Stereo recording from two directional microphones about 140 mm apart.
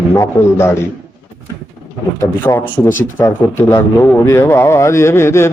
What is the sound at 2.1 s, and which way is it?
A man's voice, 20° left (ahead or behind).